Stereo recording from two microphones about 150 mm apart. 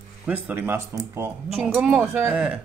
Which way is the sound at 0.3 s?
10° right (ahead or behind).